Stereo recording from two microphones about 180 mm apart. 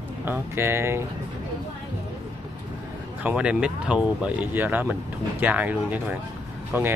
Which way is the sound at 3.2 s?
5° right (ahead or behind).